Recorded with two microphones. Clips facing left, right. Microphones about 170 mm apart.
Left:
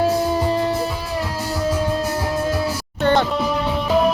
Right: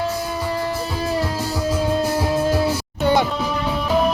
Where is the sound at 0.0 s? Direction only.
35° left (ahead or behind).